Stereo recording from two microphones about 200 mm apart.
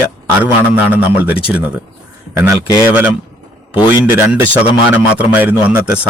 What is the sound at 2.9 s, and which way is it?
A man's voice, 10° right (ahead or behind).